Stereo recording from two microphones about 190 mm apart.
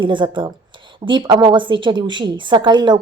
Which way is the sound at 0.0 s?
25° right (ahead or behind).